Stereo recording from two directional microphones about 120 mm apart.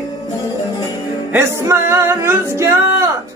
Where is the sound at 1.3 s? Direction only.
20° right (ahead or behind).